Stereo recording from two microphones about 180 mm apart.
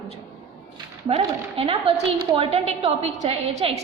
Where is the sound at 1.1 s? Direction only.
35° right (ahead or behind).